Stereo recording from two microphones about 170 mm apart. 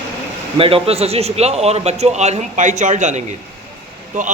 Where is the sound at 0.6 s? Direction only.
35° right (ahead or behind).